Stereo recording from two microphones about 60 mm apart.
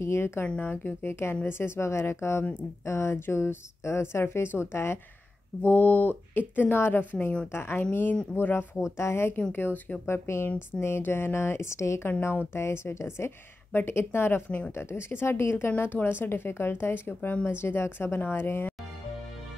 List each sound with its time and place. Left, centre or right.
0.0 s speech: left
5.6 s speech: left
7.5 s speech: left
8.9 s speech: left
10.0 s speech: left